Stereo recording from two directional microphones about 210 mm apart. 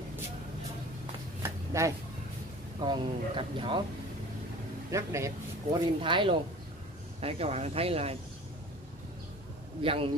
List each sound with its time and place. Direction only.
1.4 s a sound: 15° right (ahead or behind)
2.8 s speech: 25° right (ahead or behind)
4.9 s speech: 15° right (ahead or behind)
5.9 s speech: 25° right (ahead or behind)
9.8 s speech: 25° right (ahead or behind)